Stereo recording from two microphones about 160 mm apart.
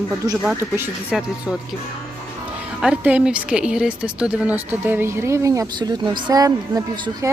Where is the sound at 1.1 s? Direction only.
5° right (ahead or behind).